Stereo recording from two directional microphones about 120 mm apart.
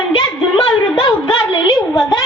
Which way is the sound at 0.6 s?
50° left (ahead or behind).